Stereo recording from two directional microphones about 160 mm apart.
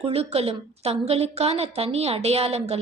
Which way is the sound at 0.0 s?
40° right (ahead or behind).